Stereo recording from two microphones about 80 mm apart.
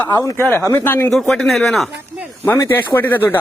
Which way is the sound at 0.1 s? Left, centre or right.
Left.